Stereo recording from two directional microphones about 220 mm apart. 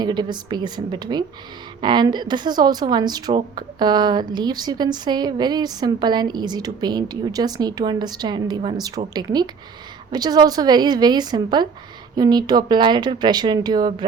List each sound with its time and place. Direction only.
0.0 s a woman's voice: 20° right (ahead or behind)